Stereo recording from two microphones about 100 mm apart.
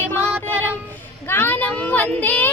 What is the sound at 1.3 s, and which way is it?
Child singing, 20° left (ahead or behind).